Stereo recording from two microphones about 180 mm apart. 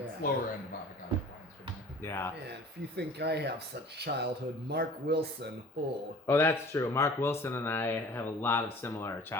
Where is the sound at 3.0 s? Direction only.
65° right (ahead or behind).